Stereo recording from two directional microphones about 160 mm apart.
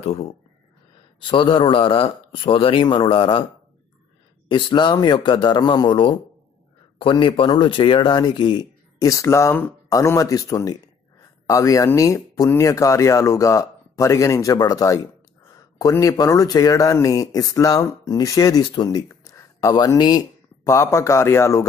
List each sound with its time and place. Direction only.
0.0 s speech: 40° left (ahead or behind)
4.5 s speech: 30° left (ahead or behind)